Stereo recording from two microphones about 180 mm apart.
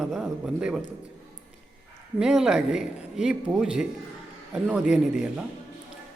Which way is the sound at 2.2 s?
5° right (ahead or behind).